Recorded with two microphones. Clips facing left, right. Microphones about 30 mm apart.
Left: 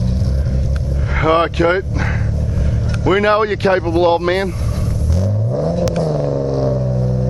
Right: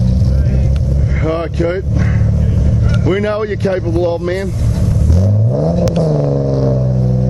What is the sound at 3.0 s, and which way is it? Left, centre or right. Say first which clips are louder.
Speech: left 4 dB; left.